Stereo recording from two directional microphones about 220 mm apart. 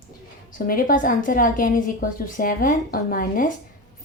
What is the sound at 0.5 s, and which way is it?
A woman's voice, 40° left (ahead or behind).